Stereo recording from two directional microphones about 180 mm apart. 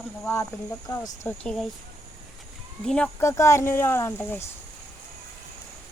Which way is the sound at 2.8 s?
5° left (ahead or behind).